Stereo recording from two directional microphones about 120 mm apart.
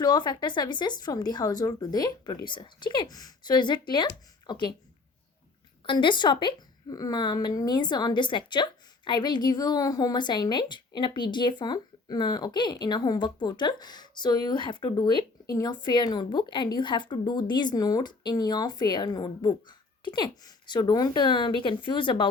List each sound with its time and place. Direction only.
0.0 s a woman's voice: 35° left (ahead or behind)
5.8 s a woman's voice: 45° left (ahead or behind)